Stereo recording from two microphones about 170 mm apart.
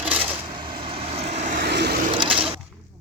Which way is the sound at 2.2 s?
30° right (ahead or behind).